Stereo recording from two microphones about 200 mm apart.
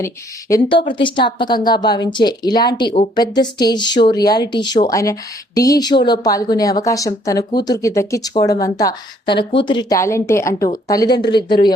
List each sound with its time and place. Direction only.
0.0 s a woman's voice: 15° left (ahead or behind)